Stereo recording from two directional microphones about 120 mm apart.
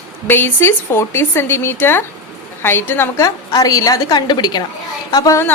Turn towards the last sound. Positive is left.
turn(degrees=35)  # may be behind; listen again after turning